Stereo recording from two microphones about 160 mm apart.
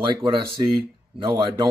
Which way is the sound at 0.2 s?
30° right (ahead or behind).